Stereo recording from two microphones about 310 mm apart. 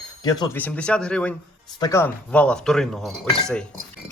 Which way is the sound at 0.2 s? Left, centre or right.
Centre.